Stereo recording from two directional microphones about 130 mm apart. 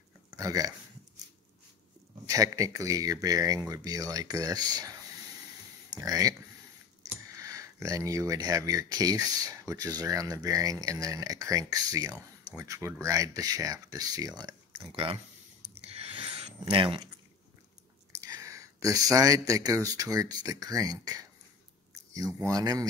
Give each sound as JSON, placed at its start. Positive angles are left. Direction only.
{"t": 0.4, "sound": "speech", "side_deg": -25}
{"t": 2.2, "sound": "speech", "side_deg": -25}
{"t": 5.9, "sound": "speech", "side_deg": -25}
{"t": 15.7, "sound": "a sound", "side_deg": -45}
{"t": 18.2, "sound": "speech", "side_deg": -25}